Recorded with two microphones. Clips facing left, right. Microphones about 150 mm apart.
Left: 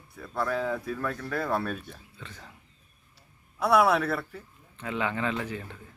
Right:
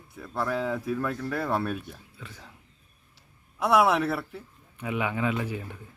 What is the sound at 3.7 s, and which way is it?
A man's voice, 20° right (ahead or behind).